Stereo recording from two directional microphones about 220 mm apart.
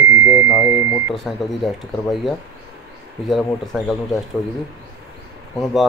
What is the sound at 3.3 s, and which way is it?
Speech, centre (ahead or behind).